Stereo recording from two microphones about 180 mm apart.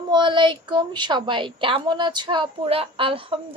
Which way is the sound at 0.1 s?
25° right (ahead or behind).